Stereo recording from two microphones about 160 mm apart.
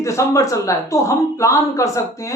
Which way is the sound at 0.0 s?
20° left (ahead or behind).